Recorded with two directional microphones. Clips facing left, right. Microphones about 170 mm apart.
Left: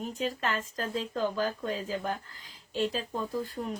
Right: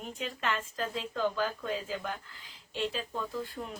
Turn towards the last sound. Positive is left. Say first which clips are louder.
# left 3 dB
turn(degrees=40)  # may be behind; listen again after turning